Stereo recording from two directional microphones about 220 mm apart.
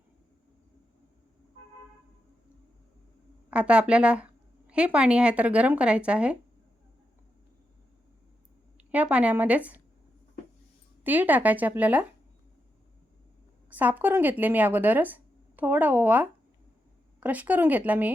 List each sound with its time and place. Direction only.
3.5 s speech: 5° right (ahead or behind)
8.8 s speech: 5° right (ahead or behind)
11.0 s speech: 10° right (ahead or behind)
13.7 s speech: 10° right (ahead or behind)